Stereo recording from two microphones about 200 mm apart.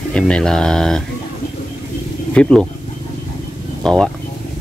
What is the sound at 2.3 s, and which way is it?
Speech, 5° left (ahead or behind).